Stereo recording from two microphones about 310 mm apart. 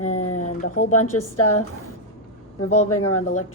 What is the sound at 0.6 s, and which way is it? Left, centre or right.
Speech, left.